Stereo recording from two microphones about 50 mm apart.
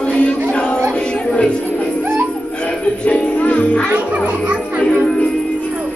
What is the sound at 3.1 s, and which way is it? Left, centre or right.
Music, left.